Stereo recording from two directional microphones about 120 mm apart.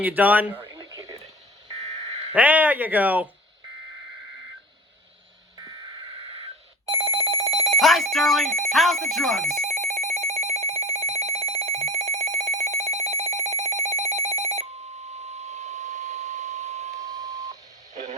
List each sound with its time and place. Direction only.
0.0 s speech: 15° right (ahead or behind)
0.7 s radio: 30° right (ahead or behind)
1.0 s radio: 55° right (ahead or behind)
2.0 s a sound: 60° right (ahead or behind)
2.3 s speech: 15° right (ahead or behind)
6.9 s telephone bell ringing: 55° right (ahead or behind)
7.8 s telephone bell ringing: centre (ahead or behind)
8.7 s speech: centre (ahead or behind)
9.6 s telephone bell ringing: 70° right (ahead or behind)
17.0 s telephone dialing: 30° right (ahead or behind)